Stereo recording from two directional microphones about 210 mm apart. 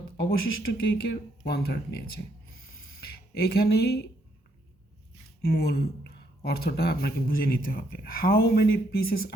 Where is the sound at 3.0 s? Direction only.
45° left (ahead or behind).